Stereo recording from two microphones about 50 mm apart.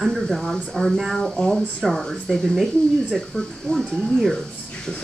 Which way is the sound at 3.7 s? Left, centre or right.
Centre.